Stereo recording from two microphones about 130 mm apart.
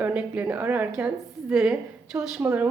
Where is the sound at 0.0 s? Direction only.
10° right (ahead or behind).